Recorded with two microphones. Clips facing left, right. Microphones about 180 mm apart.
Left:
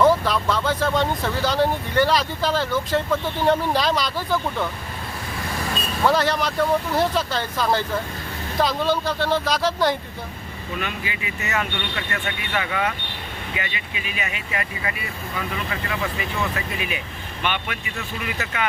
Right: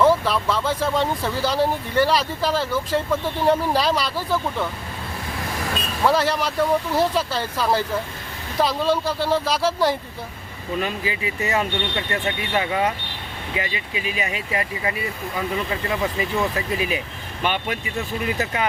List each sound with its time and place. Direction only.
0.0 s speech: 5° right (ahead or behind)
6.0 s speech: 5° right (ahead or behind)
10.8 s speech: 35° right (ahead or behind)
16.6 s speech: 35° right (ahead or behind)